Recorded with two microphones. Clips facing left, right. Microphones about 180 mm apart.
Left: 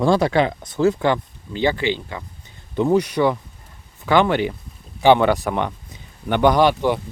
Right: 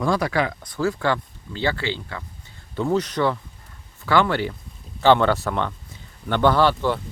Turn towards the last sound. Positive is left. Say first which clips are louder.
# left 3 dB
turn(degrees=15)  # may be behind; listen again after turning